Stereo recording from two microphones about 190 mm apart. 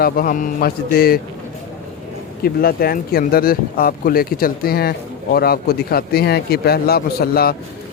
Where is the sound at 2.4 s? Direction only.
50° left (ahead or behind).